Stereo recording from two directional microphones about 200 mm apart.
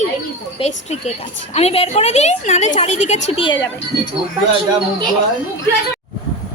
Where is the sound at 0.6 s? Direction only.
35° left (ahead or behind).